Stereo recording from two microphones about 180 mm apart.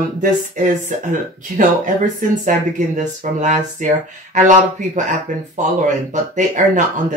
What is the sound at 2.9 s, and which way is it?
Speech, 45° right (ahead or behind).